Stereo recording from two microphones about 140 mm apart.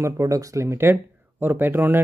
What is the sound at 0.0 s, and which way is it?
Speech, 25° right (ahead or behind).